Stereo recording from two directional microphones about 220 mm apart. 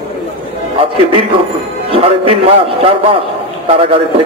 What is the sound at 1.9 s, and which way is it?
Speech, 25° right (ahead or behind).